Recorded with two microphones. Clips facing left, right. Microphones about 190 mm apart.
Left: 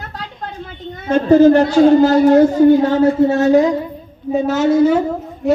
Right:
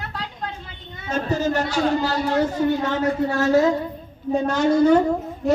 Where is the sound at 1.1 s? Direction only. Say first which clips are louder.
Left 13 dB; 60° left (ahead or behind).